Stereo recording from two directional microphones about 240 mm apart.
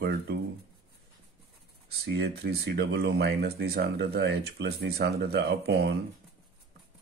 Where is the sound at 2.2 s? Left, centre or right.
Right.